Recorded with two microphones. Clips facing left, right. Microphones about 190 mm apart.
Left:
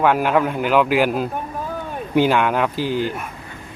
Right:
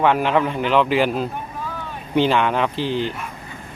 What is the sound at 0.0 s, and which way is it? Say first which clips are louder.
A man's voice: left 1 dB; 5° left (ahead or behind).